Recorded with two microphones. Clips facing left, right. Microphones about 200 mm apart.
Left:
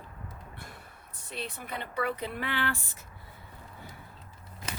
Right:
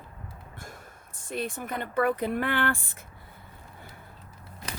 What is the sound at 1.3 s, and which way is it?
Speech, 50° right (ahead or behind).